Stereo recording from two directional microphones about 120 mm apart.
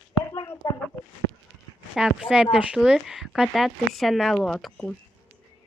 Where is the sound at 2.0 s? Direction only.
5° right (ahead or behind).